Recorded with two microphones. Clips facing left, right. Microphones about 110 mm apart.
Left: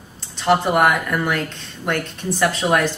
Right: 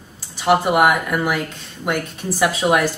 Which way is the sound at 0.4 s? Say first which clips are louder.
Right 1 dB; 5° right (ahead or behind).